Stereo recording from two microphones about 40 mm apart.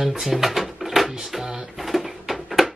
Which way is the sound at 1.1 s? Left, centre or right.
Centre.